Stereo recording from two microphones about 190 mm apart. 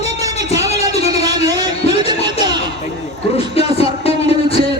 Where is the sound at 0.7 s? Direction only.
35° left (ahead or behind).